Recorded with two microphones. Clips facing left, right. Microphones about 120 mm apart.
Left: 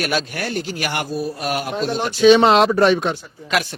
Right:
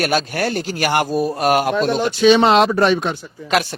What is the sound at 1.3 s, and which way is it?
Speech, 65° right (ahead or behind).